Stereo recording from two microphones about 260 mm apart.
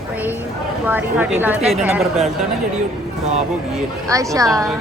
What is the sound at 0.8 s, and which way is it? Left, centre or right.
A woman's voice, centre.